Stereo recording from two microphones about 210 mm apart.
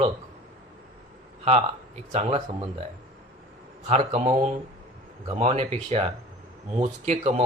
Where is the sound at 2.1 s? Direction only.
30° right (ahead or behind).